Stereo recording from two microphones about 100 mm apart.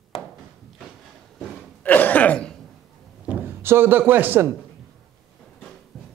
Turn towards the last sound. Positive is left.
turn(degrees=5)  # may be behind; listen again after turning